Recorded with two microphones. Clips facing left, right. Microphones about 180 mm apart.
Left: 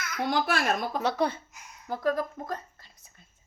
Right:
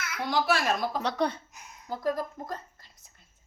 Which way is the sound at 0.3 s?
50° left (ahead or behind).